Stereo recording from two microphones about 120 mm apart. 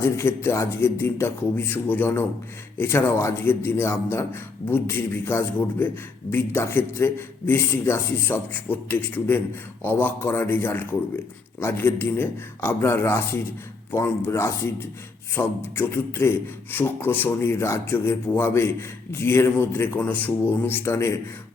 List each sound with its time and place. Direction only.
0.0 s a man's voice: 20° left (ahead or behind)